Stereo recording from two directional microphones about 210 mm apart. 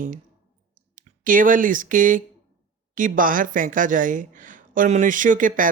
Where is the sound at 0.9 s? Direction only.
40° right (ahead or behind).